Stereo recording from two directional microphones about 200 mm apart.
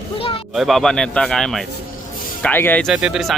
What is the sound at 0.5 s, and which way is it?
Speech, centre (ahead or behind).